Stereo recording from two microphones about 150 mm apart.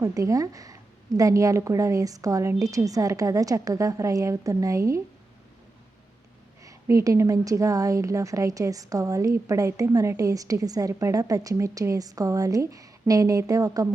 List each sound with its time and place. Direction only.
0.0 s a woman's voice: 20° right (ahead or behind)
6.7 s a woman's voice: 20° right (ahead or behind)